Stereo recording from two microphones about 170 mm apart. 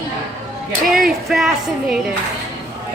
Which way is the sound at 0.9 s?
Centre (ahead or behind).